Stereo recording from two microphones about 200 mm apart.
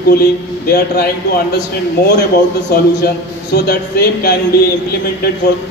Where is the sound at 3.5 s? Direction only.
55° left (ahead or behind).